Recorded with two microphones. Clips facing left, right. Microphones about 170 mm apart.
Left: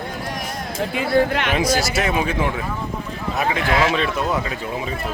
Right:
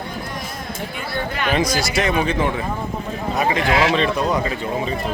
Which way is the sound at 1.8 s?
5° left (ahead or behind).